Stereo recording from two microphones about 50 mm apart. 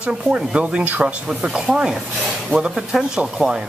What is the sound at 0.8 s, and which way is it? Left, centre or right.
Speech, right.